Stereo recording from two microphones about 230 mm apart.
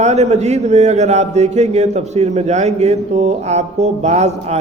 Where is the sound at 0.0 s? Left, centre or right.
Right.